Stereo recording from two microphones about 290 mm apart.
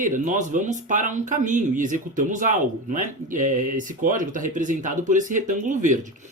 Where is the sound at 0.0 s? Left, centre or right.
Right.